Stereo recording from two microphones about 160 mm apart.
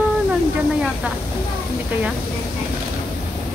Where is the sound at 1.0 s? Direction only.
10° right (ahead or behind).